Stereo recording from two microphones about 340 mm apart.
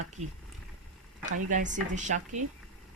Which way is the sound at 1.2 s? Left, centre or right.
Right.